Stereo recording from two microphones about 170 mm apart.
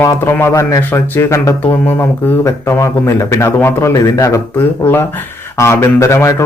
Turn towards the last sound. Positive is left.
turn(degrees=15)  # may be behind; listen again after turning